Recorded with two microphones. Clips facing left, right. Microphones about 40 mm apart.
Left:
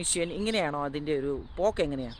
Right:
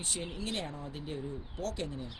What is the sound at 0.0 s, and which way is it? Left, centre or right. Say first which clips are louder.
Speech: left 9 dB; left.